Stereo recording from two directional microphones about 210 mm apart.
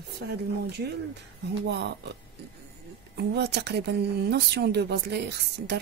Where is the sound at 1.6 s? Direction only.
55° right (ahead or behind).